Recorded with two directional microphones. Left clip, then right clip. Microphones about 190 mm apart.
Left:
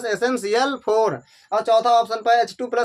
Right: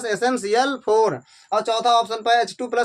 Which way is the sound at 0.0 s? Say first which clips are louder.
Even; 10° left (ahead or behind).